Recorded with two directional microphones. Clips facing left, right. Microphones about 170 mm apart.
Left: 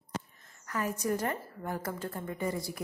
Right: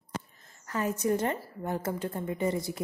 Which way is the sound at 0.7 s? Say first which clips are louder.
Right 4 dB; 25° right (ahead or behind).